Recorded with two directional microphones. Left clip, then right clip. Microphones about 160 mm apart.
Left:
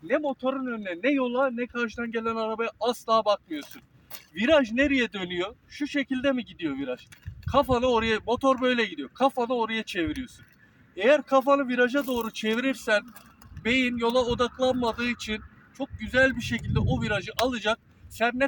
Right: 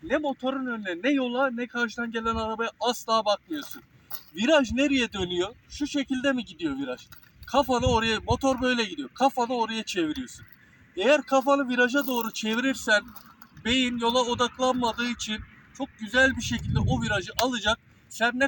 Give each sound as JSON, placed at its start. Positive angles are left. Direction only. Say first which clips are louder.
{"t": 0.1, "sound": "a man's voice", "louder": "left 1 dB", "side_deg": 20}